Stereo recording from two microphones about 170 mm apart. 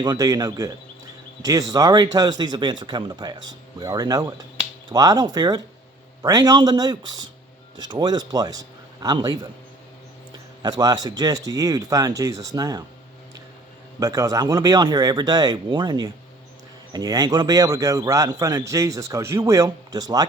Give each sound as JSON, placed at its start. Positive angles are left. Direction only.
{"t": 0.0, "sound": "a man's voice", "side_deg": -25}
{"t": 10.6, "sound": "a man's voice", "side_deg": -25}
{"t": 14.0, "sound": "a man's voice", "side_deg": -20}